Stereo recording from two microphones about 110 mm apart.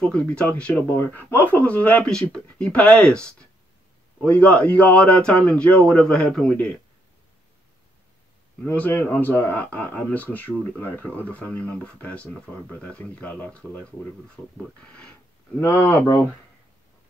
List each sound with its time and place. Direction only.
0.0 s speech: 10° left (ahead or behind)
8.6 s speech: 15° left (ahead or behind)
15.6 s speech: 20° left (ahead or behind)